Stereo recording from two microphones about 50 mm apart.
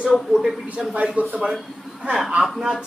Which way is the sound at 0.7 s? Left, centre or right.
Right.